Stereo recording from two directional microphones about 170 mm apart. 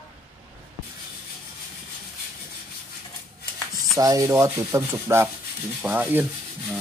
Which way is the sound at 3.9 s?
20° right (ahead or behind).